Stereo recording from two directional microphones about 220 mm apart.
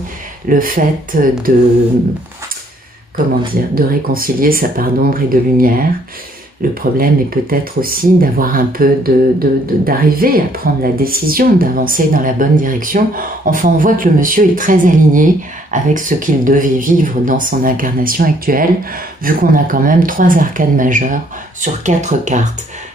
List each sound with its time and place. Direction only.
0.5 s speech: 40° right (ahead or behind)
3.7 s speech: 40° right (ahead or behind)